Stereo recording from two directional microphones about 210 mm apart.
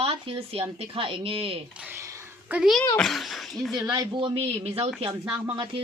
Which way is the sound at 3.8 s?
20° right (ahead or behind).